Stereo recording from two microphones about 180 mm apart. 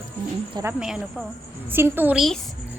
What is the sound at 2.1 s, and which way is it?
Speech, centre (ahead or behind).